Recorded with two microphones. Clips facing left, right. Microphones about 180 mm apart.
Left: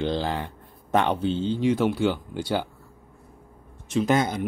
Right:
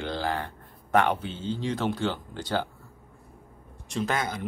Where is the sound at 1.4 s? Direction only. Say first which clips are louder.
Left 4 dB; 15° left (ahead or behind).